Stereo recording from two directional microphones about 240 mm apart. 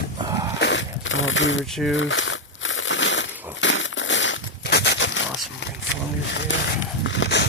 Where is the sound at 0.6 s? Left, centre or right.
Left.